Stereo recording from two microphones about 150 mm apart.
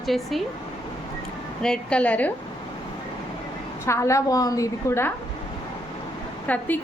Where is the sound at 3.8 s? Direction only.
20° left (ahead or behind).